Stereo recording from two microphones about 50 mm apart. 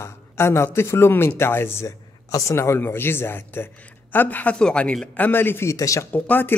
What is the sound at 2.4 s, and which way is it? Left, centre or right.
Speech, left.